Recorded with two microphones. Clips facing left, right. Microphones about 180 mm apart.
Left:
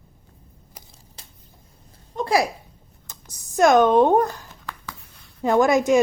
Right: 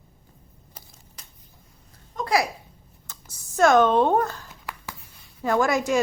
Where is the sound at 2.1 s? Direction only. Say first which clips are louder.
Left 3 dB; 25° left (ahead or behind).